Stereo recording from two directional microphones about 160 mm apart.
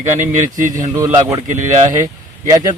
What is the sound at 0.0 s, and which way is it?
Speech, 50° right (ahead or behind).